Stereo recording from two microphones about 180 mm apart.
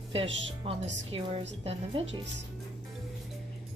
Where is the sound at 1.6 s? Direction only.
30° right (ahead or behind).